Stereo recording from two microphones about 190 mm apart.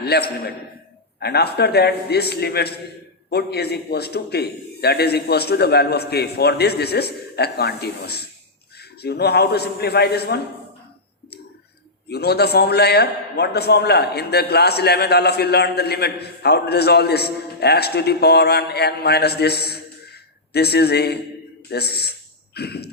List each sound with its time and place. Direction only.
0.0 s a man's voice: 60° left (ahead or behind)
12.0 s a man's voice: 60° left (ahead or behind)